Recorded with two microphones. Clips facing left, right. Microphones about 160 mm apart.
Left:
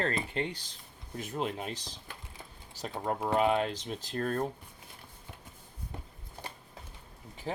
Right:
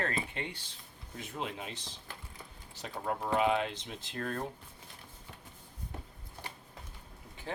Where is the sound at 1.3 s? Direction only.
40° left (ahead or behind).